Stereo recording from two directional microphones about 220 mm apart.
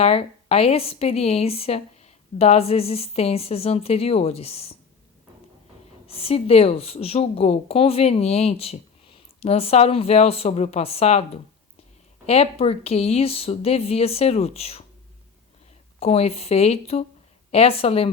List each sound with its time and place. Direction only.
0.0 s a woman's voice: 30° left (ahead or behind)
6.1 s a woman's voice: 25° left (ahead or behind)
16.0 s a woman's voice: 30° left (ahead or behind)